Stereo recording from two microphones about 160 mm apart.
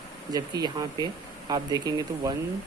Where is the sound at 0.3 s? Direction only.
25° right (ahead or behind).